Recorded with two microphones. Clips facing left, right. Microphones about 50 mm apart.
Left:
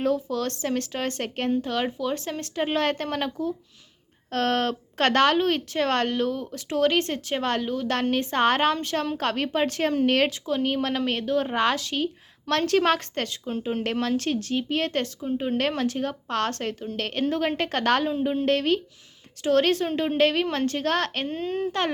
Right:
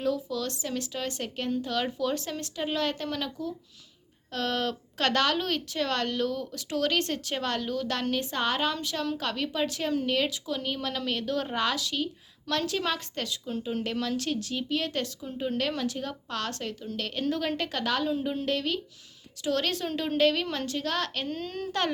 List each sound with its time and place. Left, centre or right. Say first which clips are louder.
0.0 s speech: left 4 dB; left
7.9 s speech: left 5 dB; left
11.6 s speech: left 5 dB; left
13.4 s speech: left 4 dB; left
15.2 s speech: left 5 dB; left
15.5 s speech: left 3 dB; left
17.2 s speech: left 4 dB; left
18.1 s speech: left 4 dB; left
18.4 s speech: left 7 dB; left